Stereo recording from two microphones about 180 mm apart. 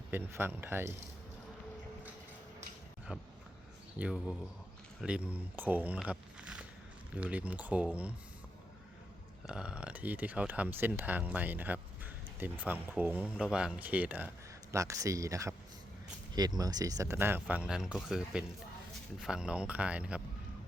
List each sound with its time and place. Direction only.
0.1 s speech: 10° right (ahead or behind)
3.1 s speech: 5° right (ahead or behind)
9.5 s speech: 5° right (ahead or behind)